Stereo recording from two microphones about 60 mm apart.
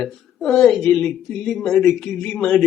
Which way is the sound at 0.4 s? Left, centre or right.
Centre.